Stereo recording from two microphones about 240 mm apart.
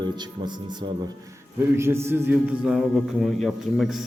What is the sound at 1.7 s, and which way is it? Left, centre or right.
A man's voice, centre.